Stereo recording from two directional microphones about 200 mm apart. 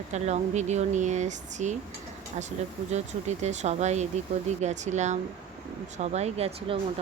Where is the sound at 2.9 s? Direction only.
35° right (ahead or behind).